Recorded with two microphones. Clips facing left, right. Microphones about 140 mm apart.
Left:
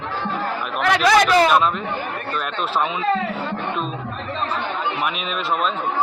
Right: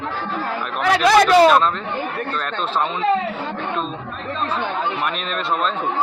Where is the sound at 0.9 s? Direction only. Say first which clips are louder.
Right 3 dB; 35° right (ahead or behind).